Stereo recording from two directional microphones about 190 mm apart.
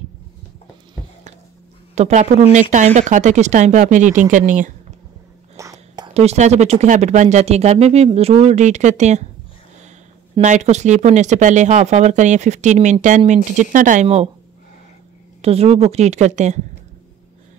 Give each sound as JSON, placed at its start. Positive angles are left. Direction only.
{"t": 2.0, "sound": "speech", "side_deg": -35}
{"t": 5.6, "sound": "whispering", "side_deg": -15}
{"t": 6.1, "sound": "speech", "side_deg": -35}
{"t": 10.4, "sound": "speech", "side_deg": -40}
{"t": 15.4, "sound": "speech", "side_deg": -30}